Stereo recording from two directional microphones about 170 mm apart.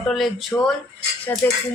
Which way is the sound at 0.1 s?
Centre (ahead or behind).